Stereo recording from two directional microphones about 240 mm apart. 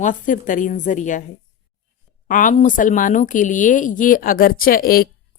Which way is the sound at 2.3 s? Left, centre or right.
Left.